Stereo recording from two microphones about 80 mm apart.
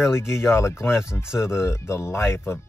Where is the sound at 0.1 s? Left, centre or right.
Left.